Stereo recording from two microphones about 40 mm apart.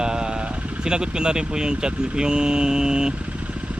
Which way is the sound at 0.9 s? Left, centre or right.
Right.